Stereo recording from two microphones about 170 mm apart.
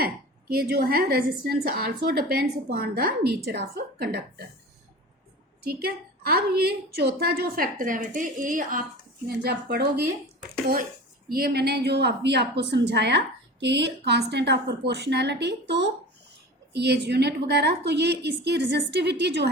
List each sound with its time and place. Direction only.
0.0 s a woman's voice: 60° right (ahead or behind)
5.6 s a woman's voice: 65° right (ahead or behind)
9.2 s a woman's voice: 75° right (ahead or behind)
11.3 s a woman's voice: 65° right (ahead or behind); by 19.5 s 85° right